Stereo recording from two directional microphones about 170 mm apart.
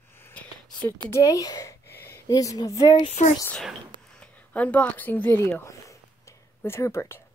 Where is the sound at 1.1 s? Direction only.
20° left (ahead or behind).